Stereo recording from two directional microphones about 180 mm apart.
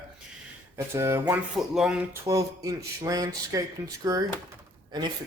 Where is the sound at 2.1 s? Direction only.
15° right (ahead or behind).